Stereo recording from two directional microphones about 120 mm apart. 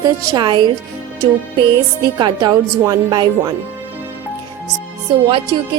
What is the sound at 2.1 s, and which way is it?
A woman's voice, 35° right (ahead or behind).